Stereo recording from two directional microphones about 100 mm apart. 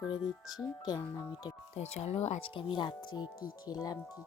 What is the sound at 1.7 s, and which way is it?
Speech, 90° left.